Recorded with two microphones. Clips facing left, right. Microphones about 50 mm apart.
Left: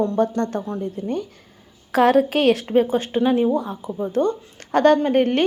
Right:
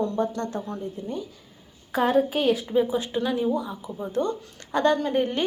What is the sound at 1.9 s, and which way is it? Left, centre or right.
Speech, left.